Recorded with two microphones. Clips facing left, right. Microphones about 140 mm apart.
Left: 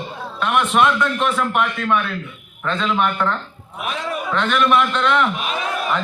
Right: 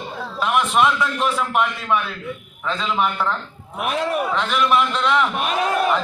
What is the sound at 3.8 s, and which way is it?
Speech, 60° right (ahead or behind).